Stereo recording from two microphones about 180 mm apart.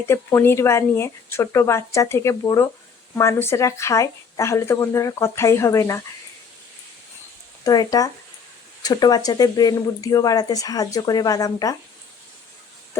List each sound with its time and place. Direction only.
0.1 s speech: 10° left (ahead or behind)
7.6 s speech: 20° left (ahead or behind)